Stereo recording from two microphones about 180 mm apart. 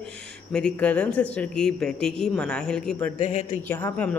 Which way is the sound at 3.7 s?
10° left (ahead or behind).